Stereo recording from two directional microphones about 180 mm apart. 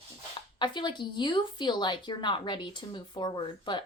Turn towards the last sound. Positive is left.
turn(degrees=25)  # may be behind; listen again after turning